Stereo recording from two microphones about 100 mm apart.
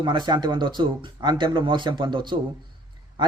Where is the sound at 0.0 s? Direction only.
50° right (ahead or behind).